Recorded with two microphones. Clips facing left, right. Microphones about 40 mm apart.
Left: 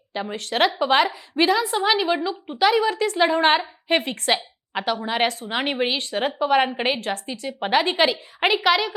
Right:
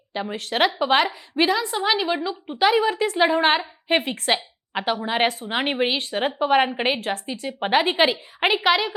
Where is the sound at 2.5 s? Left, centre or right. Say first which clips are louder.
Even; centre.